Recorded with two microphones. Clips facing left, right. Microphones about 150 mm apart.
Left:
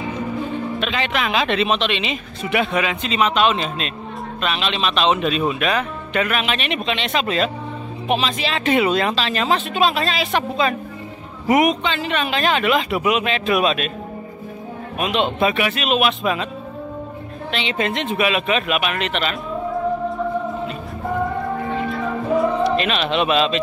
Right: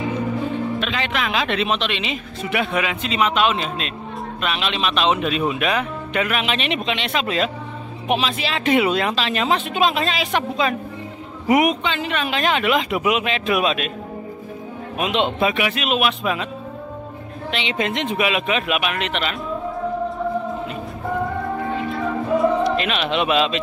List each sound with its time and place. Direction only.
0.7 s speech: centre (ahead or behind); by 7.0 s 20° right (ahead or behind)
7.0 s speech: 10° right (ahead or behind)
15.0 s a man's voice: 20° right (ahead or behind)
15.4 s speech: 10° right (ahead or behind)
17.5 s speech: 15° right (ahead or behind)
22.8 s speech: 10° right (ahead or behind)